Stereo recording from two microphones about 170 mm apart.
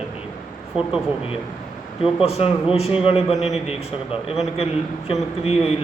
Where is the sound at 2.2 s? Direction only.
35° left (ahead or behind).